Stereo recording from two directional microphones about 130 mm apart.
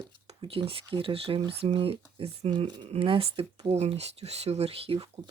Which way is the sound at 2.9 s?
45° right (ahead or behind).